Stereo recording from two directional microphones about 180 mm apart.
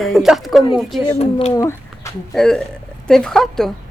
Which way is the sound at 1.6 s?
15° left (ahead or behind).